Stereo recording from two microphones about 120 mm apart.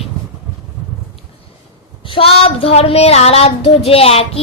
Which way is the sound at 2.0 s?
50° left (ahead or behind).